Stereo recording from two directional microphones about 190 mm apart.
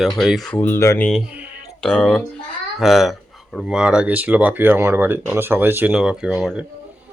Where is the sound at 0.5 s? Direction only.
10° left (ahead or behind).